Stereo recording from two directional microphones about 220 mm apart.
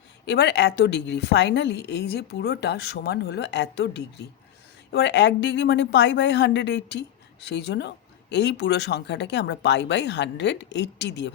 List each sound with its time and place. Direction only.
0.3 s a woman's voice: 50° left (ahead or behind)